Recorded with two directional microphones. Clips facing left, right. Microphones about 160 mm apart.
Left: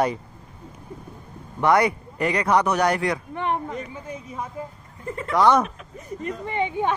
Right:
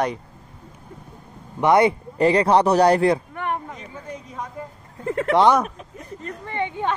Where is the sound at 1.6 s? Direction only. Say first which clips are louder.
Right 3 dB; 25° right (ahead or behind).